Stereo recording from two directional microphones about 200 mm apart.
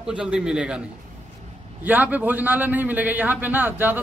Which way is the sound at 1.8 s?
10° right (ahead or behind).